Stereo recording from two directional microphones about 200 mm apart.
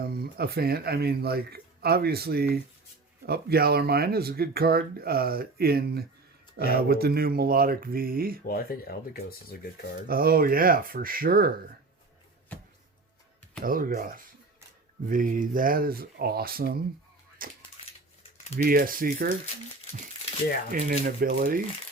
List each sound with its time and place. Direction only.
0.0 s speech: 50° right (ahead or behind)
8.4 s speech: 50° left (ahead or behind)
10.1 s speech: 45° right (ahead or behind)
12.5 s music: 10° left (ahead or behind)
13.7 s speech: 45° right (ahead or behind)
15.1 s speech: 40° right (ahead or behind)
18.6 s speech: 45° right (ahead or behind)
20.7 s speech: 45° right (ahead or behind)